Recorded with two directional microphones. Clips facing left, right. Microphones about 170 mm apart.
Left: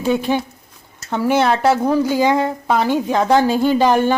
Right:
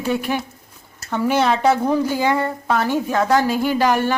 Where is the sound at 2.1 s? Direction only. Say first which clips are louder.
Left 3 dB; 15° left (ahead or behind).